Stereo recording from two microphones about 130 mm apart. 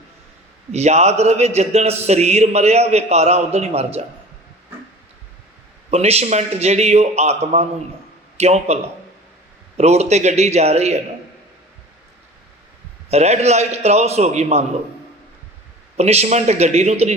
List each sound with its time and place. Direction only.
0.7 s a man's voice: 60° right (ahead or behind)
5.9 s a man's voice: 55° right (ahead or behind)
13.1 s a man's voice: 55° right (ahead or behind)
16.0 s a man's voice: 55° right (ahead or behind)